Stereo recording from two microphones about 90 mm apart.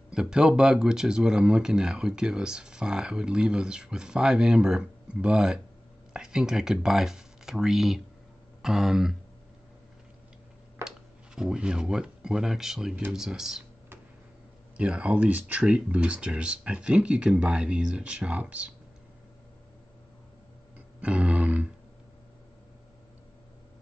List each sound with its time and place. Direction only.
0.1 s speech: 10° right (ahead or behind)
10.8 s speech: 5° right (ahead or behind)
14.8 s speech: 15° right (ahead or behind)
20.7 s music: 15° right (ahead or behind)